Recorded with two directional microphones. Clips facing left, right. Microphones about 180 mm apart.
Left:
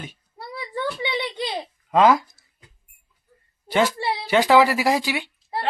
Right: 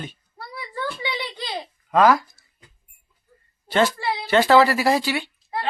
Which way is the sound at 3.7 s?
10° left (ahead or behind).